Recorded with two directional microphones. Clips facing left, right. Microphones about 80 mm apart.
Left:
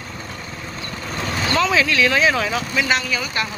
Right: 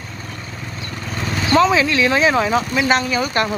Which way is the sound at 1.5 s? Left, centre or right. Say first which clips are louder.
Right 4 dB; right.